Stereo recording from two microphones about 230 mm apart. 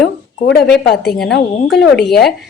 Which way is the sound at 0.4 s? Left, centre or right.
Left.